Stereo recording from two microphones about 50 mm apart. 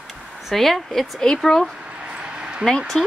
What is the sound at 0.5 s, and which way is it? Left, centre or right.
Speech, centre.